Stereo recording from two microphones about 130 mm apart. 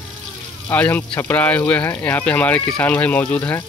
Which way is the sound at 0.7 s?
10° left (ahead or behind).